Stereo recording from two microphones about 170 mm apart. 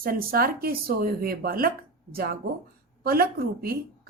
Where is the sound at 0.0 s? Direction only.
60° right (ahead or behind).